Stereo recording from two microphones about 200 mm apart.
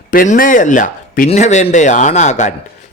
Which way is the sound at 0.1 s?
45° left (ahead or behind).